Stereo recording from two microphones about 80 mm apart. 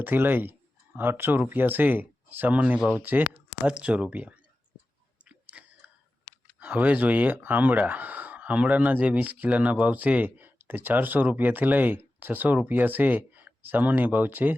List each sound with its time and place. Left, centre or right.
0.0 s speech: right
5.2 s chewing: centre
6.6 s speech: centre